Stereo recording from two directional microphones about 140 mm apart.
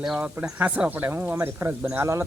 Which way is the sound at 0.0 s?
5° right (ahead or behind).